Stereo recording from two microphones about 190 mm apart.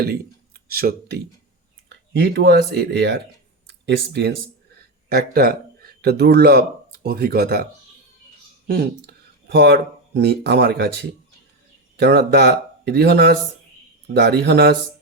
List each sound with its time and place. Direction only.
0.0 s speech: 55° right (ahead or behind)
1.9 s speech: 65° right (ahead or behind)
5.0 s speech: 55° right (ahead or behind)
8.6 s speech: 55° right (ahead or behind)